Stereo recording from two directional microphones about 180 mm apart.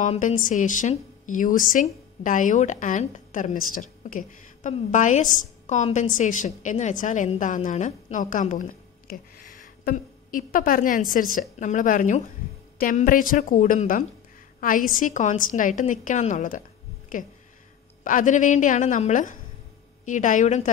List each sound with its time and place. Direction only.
0.0 s a woman's voice: 40° left (ahead or behind)